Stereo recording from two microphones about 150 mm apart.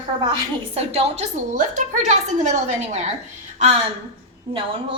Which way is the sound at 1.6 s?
55° right (ahead or behind).